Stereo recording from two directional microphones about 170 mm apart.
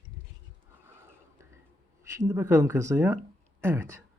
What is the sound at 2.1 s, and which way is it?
Speech, 20° right (ahead or behind).